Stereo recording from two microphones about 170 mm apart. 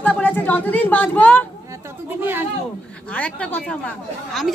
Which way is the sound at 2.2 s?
10° right (ahead or behind).